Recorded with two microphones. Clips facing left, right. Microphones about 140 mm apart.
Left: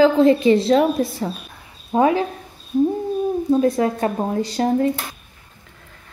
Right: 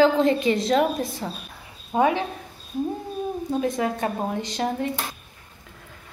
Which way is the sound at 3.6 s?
35° left (ahead or behind).